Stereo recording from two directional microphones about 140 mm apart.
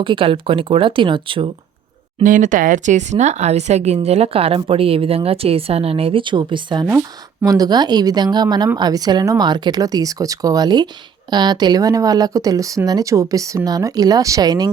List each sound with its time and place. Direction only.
0.0 s speech: 35° right (ahead or behind)
2.2 s a woman's voice: 70° right (ahead or behind); by 14.7 s 30° right (ahead or behind)